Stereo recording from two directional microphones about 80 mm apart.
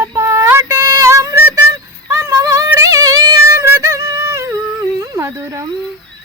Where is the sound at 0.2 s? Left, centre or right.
Right.